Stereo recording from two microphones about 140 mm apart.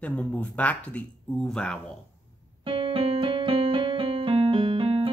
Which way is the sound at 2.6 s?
40° right (ahead or behind).